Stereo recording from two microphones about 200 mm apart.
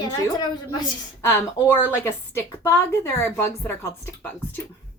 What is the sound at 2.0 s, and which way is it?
A woman's voice, 15° left (ahead or behind).